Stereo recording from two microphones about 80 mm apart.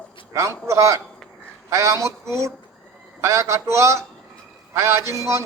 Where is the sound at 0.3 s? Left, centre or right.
Right.